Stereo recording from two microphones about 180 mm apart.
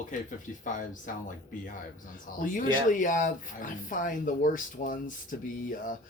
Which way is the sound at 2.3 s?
50° left (ahead or behind).